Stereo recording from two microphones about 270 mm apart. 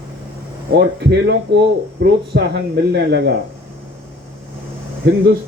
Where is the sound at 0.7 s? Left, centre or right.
Right.